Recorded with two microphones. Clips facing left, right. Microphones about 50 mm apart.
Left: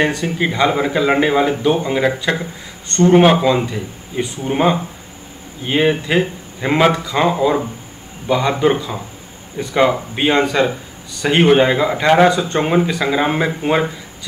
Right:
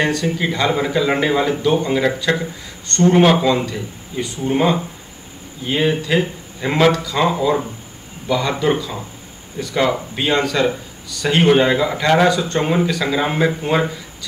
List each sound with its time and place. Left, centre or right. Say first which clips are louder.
0.0 s speech: left 1 dB; centre